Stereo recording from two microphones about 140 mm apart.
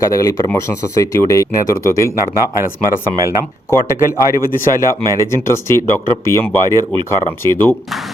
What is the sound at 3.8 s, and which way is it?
A man's voice, 20° left (ahead or behind).